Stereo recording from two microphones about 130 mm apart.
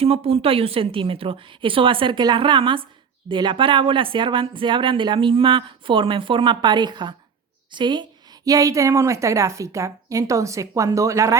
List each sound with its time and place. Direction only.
0.0 s a woman's voice: 50° right (ahead or behind); by 11.3 s 25° right (ahead or behind)